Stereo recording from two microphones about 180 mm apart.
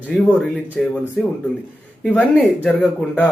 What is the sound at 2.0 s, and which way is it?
Speech, 5° left (ahead or behind).